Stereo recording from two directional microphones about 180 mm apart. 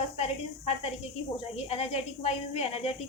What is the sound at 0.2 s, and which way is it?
A woman's voice, 35° left (ahead or behind).